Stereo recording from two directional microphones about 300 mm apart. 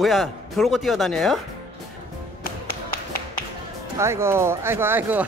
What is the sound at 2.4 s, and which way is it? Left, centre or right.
Tap, left.